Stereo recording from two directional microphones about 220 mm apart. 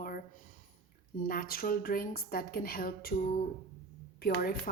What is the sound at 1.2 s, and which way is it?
A woman's voice, 40° left (ahead or behind).